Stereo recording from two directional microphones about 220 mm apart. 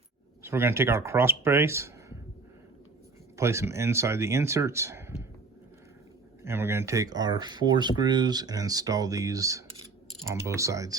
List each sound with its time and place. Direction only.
0.4 s speech: 10° right (ahead or behind)
3.3 s speech: 10° right (ahead or behind)
6.4 s speech: 10° right (ahead or behind)